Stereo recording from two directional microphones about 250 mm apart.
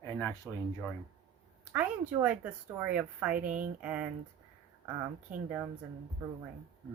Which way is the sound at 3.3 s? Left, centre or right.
Right.